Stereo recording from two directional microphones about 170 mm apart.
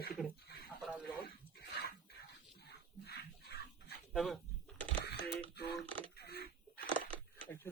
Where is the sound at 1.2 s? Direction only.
65° left (ahead or behind).